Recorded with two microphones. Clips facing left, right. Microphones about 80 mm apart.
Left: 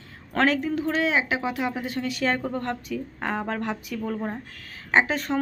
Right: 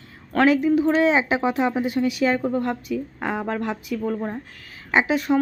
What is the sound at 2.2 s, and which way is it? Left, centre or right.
Speech, centre.